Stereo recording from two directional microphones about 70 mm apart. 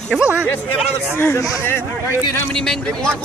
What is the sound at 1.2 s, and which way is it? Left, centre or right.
Speech, left.